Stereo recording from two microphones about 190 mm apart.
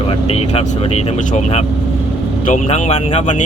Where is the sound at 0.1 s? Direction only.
30° left (ahead or behind).